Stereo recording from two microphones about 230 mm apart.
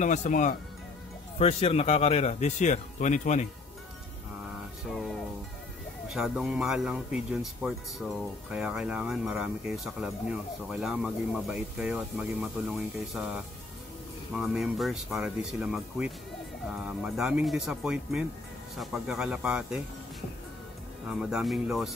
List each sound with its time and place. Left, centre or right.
0.0 s speech: left
4.8 s music: centre
6.1 s speech: centre
21.1 s speech: centre